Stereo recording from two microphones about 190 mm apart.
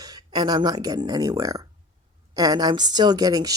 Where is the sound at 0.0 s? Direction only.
20° right (ahead or behind).